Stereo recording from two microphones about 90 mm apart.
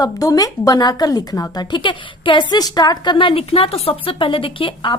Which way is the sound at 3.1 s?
80° left.